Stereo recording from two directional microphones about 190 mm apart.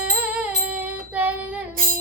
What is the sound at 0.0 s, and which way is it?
Music, 5° right (ahead or behind).